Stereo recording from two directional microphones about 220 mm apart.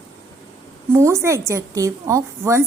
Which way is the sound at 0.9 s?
10° right (ahead or behind).